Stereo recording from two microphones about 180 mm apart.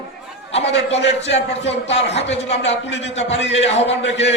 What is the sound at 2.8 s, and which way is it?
Speech, 85° left.